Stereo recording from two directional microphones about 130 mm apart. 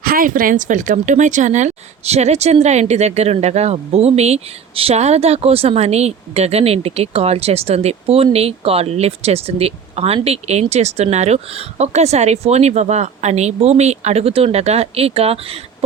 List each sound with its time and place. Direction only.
0.0 s speech: 90° right; by 15.5 s 50° right (ahead or behind)